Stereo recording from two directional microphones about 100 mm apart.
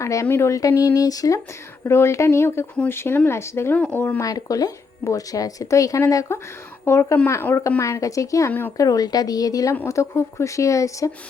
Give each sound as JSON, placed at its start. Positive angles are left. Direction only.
{"t": 0.0, "sound": "speech", "side_deg": 30}
{"t": 1.8, "sound": "speech", "side_deg": 25}
{"t": 4.2, "sound": "speech", "side_deg": 35}